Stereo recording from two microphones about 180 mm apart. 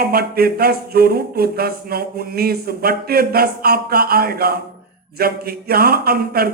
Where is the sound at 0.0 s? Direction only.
60° right (ahead or behind).